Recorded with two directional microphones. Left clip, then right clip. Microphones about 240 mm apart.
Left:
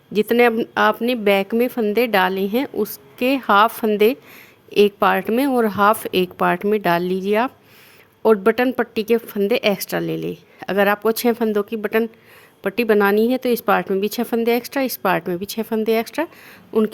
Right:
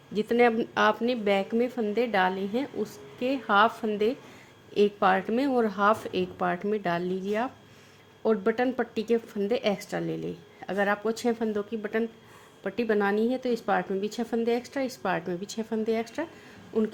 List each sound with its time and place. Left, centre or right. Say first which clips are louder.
0.1 s speech: left 8 dB; left